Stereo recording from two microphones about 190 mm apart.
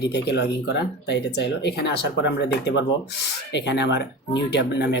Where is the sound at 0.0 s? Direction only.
65° left (ahead or behind).